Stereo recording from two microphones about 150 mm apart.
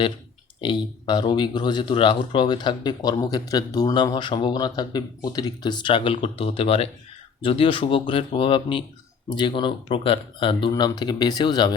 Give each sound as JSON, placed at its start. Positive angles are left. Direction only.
{"t": 0.6, "sound": "speech", "side_deg": 30}